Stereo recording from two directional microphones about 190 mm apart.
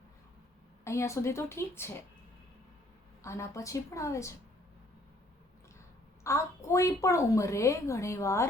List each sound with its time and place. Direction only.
0.9 s a woman's voice: 15° left (ahead or behind)
3.2 s a woman's voice: 15° left (ahead or behind)
6.2 s a woman's voice: 15° left (ahead or behind)